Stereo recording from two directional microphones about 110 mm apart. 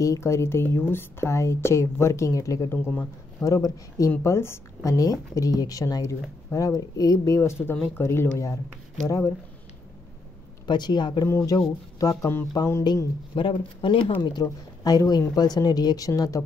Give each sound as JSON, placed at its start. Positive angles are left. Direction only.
{"t": 0.0, "sound": "speech", "side_deg": 25}
{"t": 10.7, "sound": "speech", "side_deg": 45}
{"t": 11.2, "sound": "speech", "side_deg": 30}
{"t": 12.8, "sound": "speech", "side_deg": 45}